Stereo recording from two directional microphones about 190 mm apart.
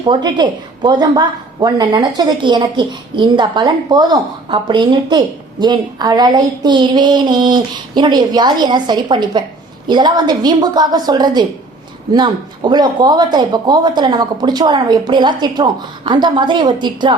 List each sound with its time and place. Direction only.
0.0 s a woman's voice: 25° right (ahead or behind)